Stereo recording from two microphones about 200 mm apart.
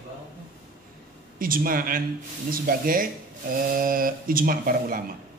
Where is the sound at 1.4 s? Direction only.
45° right (ahead or behind).